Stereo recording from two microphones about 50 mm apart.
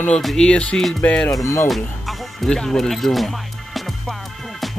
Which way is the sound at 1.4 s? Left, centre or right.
Left.